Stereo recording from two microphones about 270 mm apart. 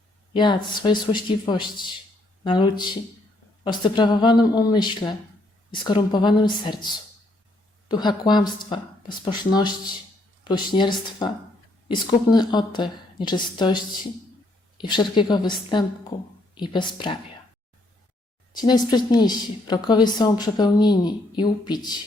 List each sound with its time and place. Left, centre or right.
0.3 s a woman's voice: centre
14.8 s a woman's voice: centre
18.5 s a woman's voice: centre